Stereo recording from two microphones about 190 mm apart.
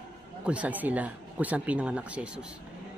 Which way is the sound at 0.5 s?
5° right (ahead or behind).